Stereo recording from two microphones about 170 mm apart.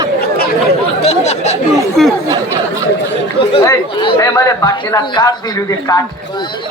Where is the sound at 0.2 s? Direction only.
65° left (ahead or behind).